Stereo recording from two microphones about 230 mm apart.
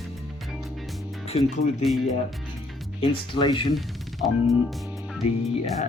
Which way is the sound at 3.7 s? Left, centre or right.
Centre.